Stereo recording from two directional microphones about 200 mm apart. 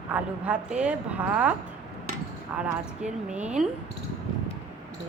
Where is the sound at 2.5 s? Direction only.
5° right (ahead or behind).